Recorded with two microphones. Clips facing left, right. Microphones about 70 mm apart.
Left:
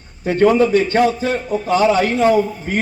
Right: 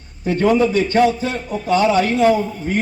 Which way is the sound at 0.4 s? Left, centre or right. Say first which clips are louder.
Left 3 dB; left.